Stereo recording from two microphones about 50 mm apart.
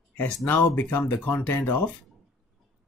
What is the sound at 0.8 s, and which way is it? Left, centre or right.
Speech, left.